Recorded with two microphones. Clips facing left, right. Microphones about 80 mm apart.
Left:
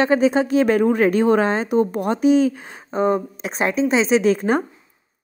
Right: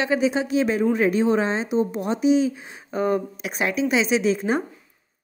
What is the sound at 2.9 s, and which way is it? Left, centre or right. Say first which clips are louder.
A woman's voice: left 3 dB; left.